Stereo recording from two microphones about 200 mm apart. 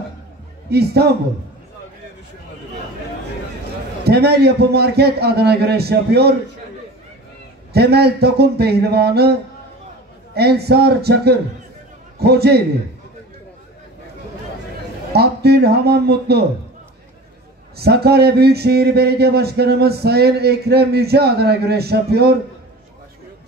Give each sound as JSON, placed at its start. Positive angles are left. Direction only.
{"t": 0.7, "sound": "a man's voice", "side_deg": -55}
{"t": 4.0, "sound": "a man's voice", "side_deg": -55}
{"t": 7.7, "sound": "a man's voice", "side_deg": -55}
{"t": 15.1, "sound": "a man's voice", "side_deg": -55}
{"t": 17.7, "sound": "a man's voice", "side_deg": -50}